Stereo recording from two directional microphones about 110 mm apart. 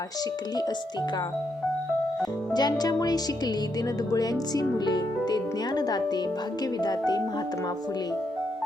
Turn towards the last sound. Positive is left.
turn(degrees=40)  # may be behind; listen again after turning